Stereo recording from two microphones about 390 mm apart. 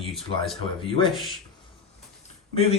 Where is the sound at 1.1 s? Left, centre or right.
Centre.